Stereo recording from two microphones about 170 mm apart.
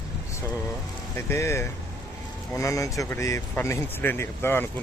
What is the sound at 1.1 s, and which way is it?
Speech, 15° left (ahead or behind).